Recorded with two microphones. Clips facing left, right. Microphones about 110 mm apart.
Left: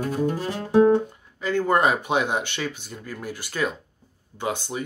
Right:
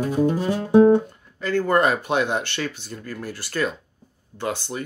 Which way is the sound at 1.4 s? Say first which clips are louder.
Right 1 dB; 15° left (ahead or behind).